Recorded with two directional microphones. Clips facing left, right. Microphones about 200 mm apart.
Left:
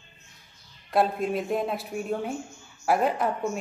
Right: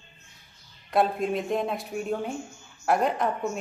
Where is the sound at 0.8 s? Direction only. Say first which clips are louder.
Even; centre (ahead or behind).